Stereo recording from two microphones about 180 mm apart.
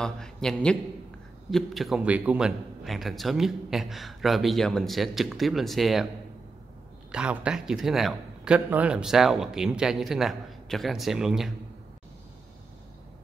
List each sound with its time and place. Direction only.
0.0 s a man's voice: 5° left (ahead or behind)
7.1 s a man's voice: 5° right (ahead or behind)